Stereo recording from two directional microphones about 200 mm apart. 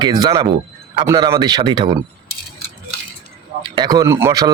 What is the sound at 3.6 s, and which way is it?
Speech, 20° right (ahead or behind).